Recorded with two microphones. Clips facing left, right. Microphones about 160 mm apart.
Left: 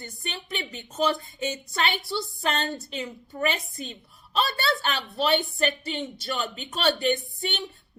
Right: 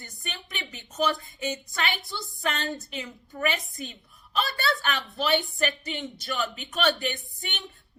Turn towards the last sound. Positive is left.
turn(degrees=30)  # may be behind; listen again after turning